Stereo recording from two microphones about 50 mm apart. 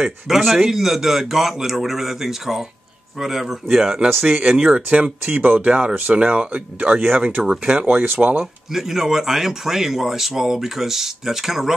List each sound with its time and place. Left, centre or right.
0.0 s speech: centre
4.5 s speech: right
5.7 s speech: right
8.0 s speech: right
8.7 s speech: centre